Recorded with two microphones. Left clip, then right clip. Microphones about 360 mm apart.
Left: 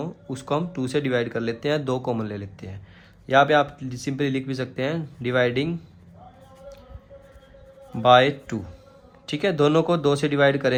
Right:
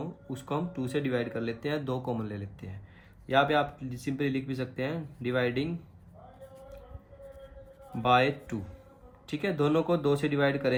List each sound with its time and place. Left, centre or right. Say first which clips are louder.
0.0 s speech: left 7 dB; left
8.0 s speech: left 9 dB; left